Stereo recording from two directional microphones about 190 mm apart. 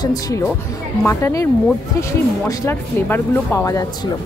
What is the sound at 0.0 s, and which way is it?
A woman's voice, 20° left (ahead or behind).